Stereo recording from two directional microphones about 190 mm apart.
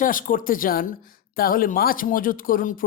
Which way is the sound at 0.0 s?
45° left (ahead or behind).